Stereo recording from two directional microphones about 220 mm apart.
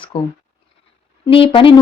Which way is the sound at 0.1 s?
25° left (ahead or behind).